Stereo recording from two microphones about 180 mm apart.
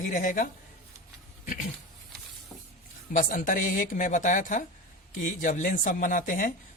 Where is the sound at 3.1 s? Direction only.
45° left (ahead or behind).